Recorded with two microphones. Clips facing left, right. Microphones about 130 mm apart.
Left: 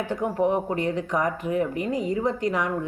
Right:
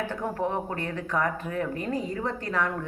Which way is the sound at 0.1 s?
15° left (ahead or behind).